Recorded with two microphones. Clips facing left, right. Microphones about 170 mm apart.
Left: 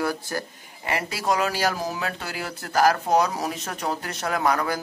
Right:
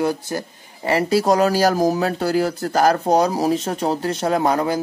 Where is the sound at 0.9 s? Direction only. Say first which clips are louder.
Right 9 dB; 35° right (ahead or behind).